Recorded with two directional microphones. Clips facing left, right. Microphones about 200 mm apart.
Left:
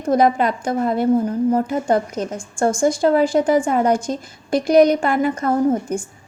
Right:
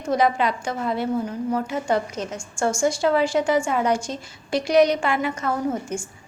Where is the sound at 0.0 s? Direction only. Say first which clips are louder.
Left 5 dB; 50° left (ahead or behind).